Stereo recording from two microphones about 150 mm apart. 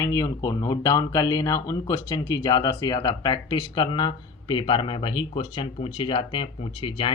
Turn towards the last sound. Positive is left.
turn(degrees=35)  # may be behind; listen again after turning